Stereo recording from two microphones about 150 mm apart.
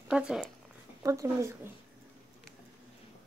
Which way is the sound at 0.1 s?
5° right (ahead or behind).